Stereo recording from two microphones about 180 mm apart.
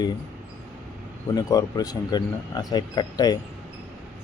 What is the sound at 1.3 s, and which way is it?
Speech, 20° left (ahead or behind).